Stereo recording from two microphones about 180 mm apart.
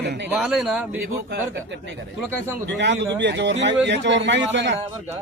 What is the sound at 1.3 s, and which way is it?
A man's voice, 75° right (ahead or behind).